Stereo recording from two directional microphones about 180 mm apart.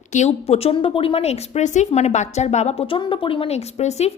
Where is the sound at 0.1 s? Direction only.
40° left (ahead or behind).